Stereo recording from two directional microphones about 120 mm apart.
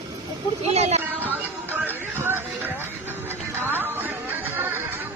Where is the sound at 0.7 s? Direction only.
65° right (ahead or behind).